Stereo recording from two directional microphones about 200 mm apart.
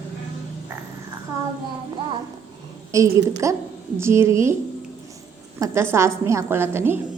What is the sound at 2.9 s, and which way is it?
A woman's voice, 15° right (ahead or behind).